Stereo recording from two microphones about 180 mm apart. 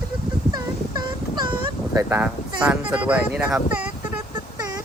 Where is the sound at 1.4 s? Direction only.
25° right (ahead or behind).